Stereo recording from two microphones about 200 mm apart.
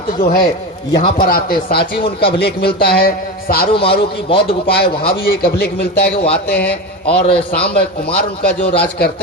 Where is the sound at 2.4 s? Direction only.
55° left (ahead or behind).